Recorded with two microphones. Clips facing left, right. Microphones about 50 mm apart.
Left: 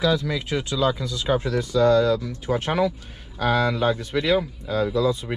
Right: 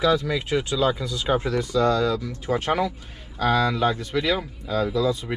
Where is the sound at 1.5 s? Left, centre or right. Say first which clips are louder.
Left 6 dB; right.